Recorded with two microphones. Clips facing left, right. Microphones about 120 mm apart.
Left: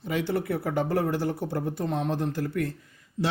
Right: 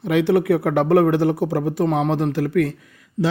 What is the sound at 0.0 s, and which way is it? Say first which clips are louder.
Speech: right 10 dB; 75° right (ahead or behind).